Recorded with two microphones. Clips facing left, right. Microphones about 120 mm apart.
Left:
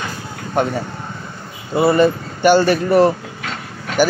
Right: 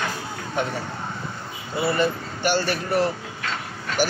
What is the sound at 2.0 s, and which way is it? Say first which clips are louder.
Speech: left 8 dB; 50° left (ahead or behind).